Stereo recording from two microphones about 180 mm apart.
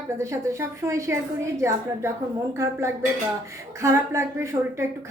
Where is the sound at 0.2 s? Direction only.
15° right (ahead or behind).